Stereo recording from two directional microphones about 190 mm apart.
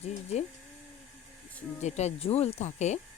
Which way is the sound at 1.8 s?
35° left (ahead or behind).